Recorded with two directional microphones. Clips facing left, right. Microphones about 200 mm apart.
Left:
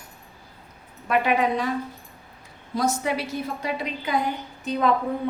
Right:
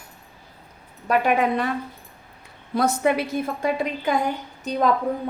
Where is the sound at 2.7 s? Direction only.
60° right (ahead or behind).